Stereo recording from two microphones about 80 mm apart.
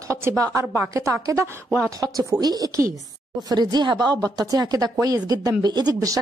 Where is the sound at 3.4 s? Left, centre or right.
Right.